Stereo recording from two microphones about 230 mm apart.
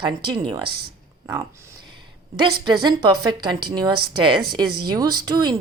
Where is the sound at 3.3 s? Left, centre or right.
Centre.